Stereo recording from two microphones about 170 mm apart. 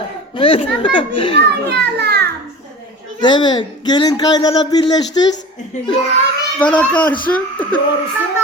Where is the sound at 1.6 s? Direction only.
75° right (ahead or behind).